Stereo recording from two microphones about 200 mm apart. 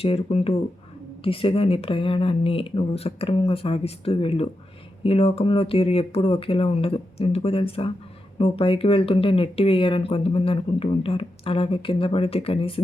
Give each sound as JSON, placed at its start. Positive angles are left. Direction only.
{"t": 0.0, "sound": "speech", "side_deg": 30}